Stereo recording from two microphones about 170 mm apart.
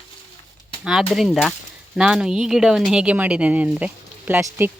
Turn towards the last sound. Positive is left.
turn(degrees=-10)  # may be behind; listen again after turning